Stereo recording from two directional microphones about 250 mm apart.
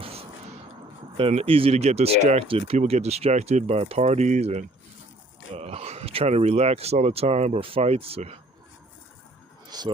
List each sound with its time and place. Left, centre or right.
0.0 s a sound: right
1.1 s speech: right
9.6 s speech: centre